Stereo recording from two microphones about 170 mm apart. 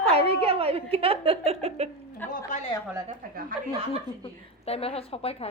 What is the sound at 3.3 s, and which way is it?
Speech, 60° right (ahead or behind).